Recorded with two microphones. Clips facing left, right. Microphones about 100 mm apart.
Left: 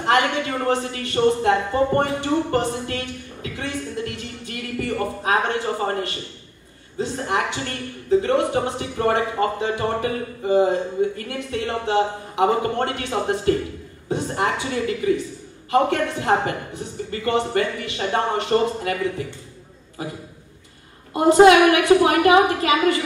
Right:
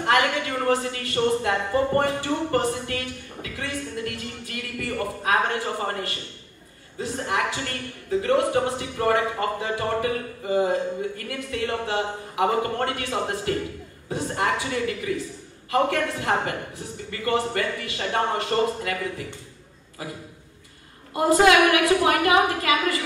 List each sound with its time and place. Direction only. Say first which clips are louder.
0.0 s a woman's voice: left 2 dB; 30° left (ahead or behind)
21.1 s a woman's voice: left 5 dB; 25° left (ahead or behind)